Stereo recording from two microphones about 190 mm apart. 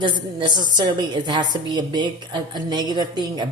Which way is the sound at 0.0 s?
25° right (ahead or behind).